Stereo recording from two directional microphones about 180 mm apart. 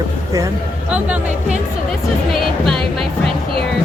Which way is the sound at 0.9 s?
5° right (ahead or behind).